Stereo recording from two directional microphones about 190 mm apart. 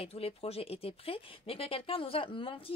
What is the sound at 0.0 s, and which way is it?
Speech, 30° left (ahead or behind).